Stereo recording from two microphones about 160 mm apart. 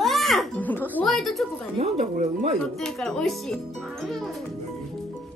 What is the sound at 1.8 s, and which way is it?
Speech, 40° right (ahead or behind).